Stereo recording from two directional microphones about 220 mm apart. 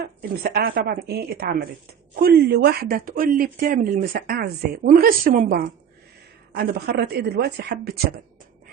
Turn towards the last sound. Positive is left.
turn(degrees=-45)  # may be behind; listen again after turning